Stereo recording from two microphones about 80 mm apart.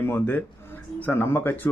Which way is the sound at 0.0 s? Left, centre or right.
Left.